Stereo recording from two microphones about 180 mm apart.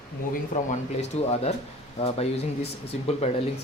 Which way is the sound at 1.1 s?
35° left (ahead or behind).